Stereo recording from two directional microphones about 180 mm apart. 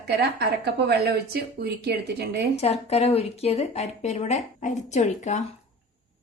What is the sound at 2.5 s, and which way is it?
A woman's voice, 35° left (ahead or behind).